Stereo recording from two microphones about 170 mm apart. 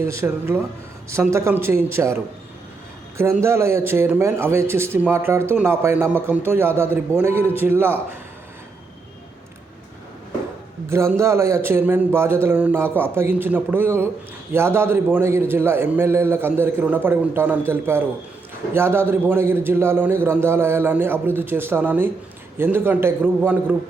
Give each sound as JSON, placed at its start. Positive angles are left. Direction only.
{"t": 0.0, "sound": "a man's voice", "side_deg": -15}
{"t": 3.2, "sound": "a man's voice", "side_deg": -15}
{"t": 10.8, "sound": "a man's voice", "side_deg": -15}